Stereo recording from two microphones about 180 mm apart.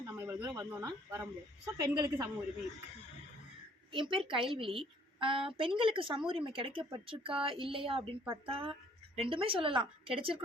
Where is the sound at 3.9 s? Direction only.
30° right (ahead or behind).